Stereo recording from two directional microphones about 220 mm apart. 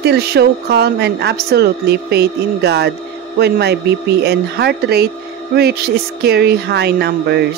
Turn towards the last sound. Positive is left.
turn(degrees=-50)  # may be behind; listen again after turning